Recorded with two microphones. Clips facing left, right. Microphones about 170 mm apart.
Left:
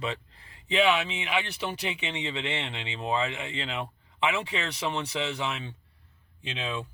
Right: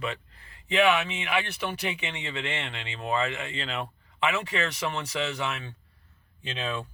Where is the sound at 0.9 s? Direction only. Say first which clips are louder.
Right 1 dB; 15° left (ahead or behind).